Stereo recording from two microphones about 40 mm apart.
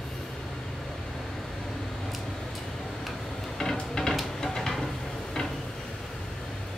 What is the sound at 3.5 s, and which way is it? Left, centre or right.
Music, centre.